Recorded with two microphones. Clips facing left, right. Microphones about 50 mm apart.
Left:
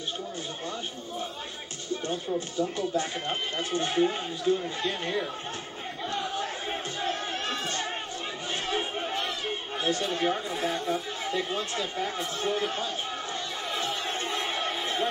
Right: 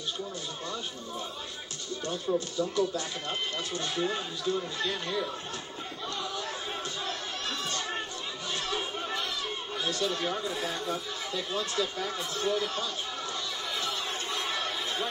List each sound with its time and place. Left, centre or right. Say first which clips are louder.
1.9 s speech: even; left
7.1 s chatter: left 4 dB; left
8.6 s crowd: left 4 dB; left
9.8 s speech: left 4 dB; left
13.7 s a sound: left 4 dB; left